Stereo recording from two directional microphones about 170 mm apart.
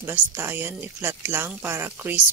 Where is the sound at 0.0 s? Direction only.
15° right (ahead or behind).